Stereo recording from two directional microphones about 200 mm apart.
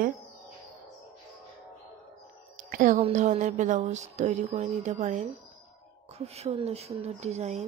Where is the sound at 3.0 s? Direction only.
35° right (ahead or behind).